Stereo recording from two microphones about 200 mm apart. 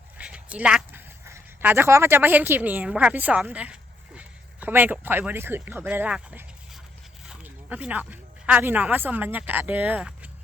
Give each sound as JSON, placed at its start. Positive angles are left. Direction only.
{"t": 0.2, "sound": "speech", "side_deg": -5}